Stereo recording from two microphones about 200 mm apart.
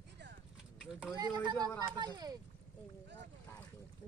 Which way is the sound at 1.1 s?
20° right (ahead or behind).